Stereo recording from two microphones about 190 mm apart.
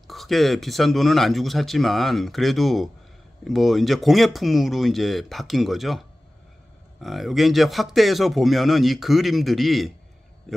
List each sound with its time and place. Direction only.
0.1 s speech: centre (ahead or behind)